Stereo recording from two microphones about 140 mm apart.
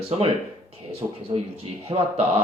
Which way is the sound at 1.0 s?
25° right (ahead or behind).